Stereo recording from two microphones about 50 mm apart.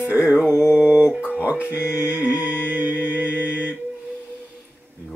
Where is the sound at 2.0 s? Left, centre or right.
Right.